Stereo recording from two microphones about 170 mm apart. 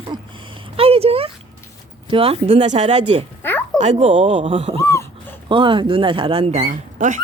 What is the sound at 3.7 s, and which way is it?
Speech, 40° right (ahead or behind).